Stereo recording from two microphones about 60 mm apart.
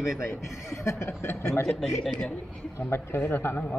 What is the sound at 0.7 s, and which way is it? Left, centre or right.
Speech, left.